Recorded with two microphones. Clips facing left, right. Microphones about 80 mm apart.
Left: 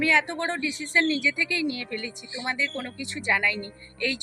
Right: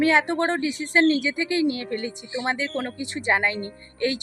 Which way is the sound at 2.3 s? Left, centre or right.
Right.